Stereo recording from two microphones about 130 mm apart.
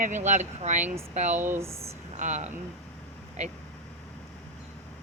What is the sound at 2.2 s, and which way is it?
Speech, 65° right (ahead or behind).